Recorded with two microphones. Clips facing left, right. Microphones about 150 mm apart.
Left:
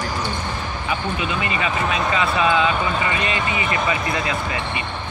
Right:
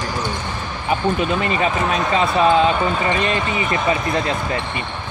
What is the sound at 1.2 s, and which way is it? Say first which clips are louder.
Speech: right 5 dB; 40° right (ahead or behind).